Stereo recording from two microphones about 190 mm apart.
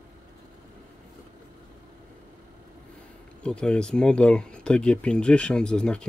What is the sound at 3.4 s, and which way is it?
Speech, 5° left (ahead or behind).